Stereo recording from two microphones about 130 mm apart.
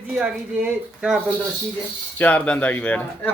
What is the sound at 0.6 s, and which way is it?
Speech, 5° right (ahead or behind).